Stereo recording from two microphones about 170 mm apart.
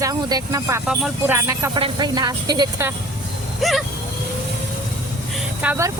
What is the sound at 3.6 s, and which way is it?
Speech, centre (ahead or behind).